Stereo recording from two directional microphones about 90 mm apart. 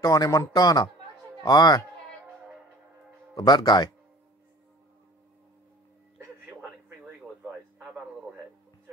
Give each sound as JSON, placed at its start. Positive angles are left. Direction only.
{"t": 0.0, "sound": "a man's voice", "side_deg": 40}
{"t": 3.3, "sound": "speech", "side_deg": 55}
{"t": 6.1, "sound": "a sound", "side_deg": -20}